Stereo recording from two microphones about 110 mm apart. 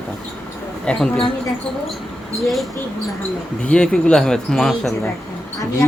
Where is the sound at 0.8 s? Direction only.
5° left (ahead or behind).